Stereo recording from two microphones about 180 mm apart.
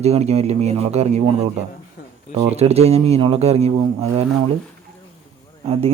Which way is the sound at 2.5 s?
35° right (ahead or behind).